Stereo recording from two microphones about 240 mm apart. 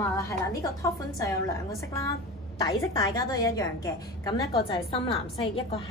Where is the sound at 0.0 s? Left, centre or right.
Centre.